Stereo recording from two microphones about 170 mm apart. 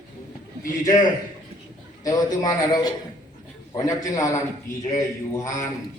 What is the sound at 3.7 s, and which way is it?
A man's voice, 20° left (ahead or behind).